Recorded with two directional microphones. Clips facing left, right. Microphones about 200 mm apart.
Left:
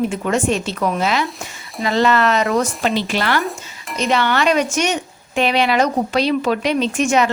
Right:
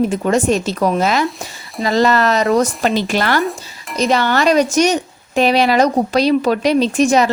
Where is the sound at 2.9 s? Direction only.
45° right (ahead or behind).